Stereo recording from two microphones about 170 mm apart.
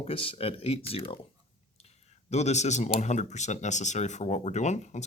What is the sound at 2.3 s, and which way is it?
Speech, 40° left (ahead or behind).